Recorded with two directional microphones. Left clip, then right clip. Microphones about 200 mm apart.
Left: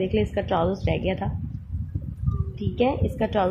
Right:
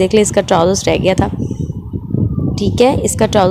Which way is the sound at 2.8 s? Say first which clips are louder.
Right 12 dB; 50° right (ahead or behind).